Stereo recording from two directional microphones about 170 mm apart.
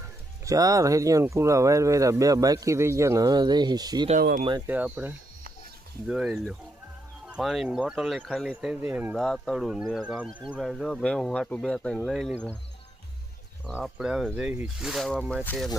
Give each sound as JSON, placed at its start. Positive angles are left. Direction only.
{"t": 0.4, "sound": "speech", "side_deg": -20}
{"t": 4.2, "sound": "speech", "side_deg": -60}
{"t": 4.6, "sound": "speech", "side_deg": -10}
{"t": 9.1, "sound": "speech", "side_deg": 5}
{"t": 13.7, "sound": "speech", "side_deg": -5}